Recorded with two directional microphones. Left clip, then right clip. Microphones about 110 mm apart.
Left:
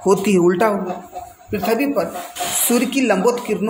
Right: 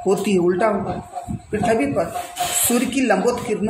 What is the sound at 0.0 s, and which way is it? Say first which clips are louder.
Speech: left 3 dB; 40° left (ahead or behind).